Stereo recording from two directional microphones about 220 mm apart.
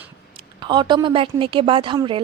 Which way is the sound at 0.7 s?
20° right (ahead or behind).